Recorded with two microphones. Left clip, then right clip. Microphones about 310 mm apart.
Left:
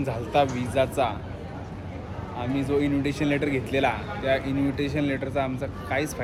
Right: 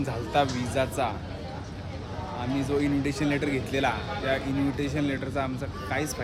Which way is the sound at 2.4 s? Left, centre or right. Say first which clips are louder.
Left 3 dB; centre.